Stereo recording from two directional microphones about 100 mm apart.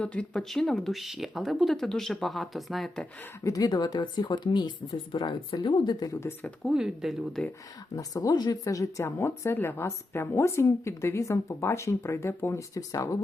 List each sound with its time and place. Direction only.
0.0 s speech: 10° left (ahead or behind)
3.4 s speech: 40° left (ahead or behind)
6.7 s speech: 5° right (ahead or behind)
7.9 s speech: 35° left (ahead or behind)